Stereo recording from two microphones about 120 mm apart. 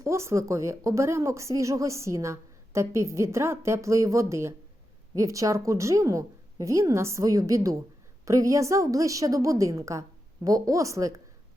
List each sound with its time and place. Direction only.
0.0 s a woman's voice: 25° right (ahead or behind)